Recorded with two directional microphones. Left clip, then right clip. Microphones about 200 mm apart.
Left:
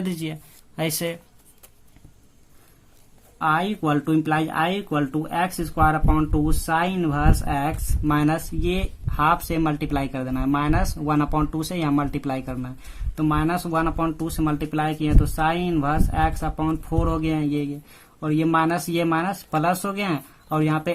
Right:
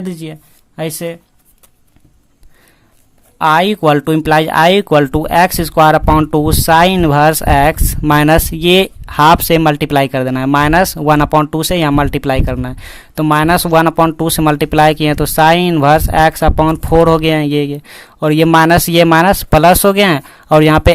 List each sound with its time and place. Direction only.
0.0 s speech: 20° right (ahead or behind)
3.3 s speech: 45° right (ahead or behind)